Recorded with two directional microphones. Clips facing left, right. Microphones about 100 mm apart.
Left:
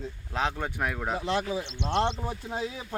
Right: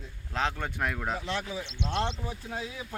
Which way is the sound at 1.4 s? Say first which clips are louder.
Left 4 dB; 30° left (ahead or behind).